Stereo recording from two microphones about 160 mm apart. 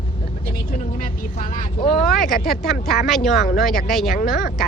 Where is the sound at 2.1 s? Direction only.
Centre (ahead or behind).